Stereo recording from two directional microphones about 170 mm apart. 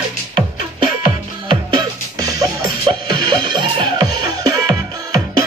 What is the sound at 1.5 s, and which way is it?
Music, 25° right (ahead or behind).